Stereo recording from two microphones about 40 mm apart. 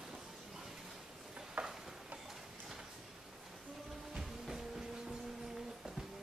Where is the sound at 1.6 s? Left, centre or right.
Right.